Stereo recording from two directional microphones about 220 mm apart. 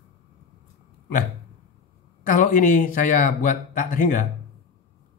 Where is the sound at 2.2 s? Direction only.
40° left (ahead or behind).